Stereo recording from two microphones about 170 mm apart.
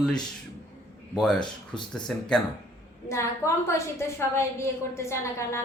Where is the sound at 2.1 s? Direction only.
5° left (ahead or behind).